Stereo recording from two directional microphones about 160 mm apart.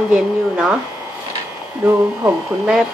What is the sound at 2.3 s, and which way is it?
Speech, 5° right (ahead or behind).